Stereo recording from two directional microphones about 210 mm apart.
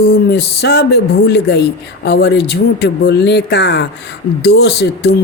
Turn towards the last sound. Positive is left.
turn(degrees=50)  # may be behind; listen again after turning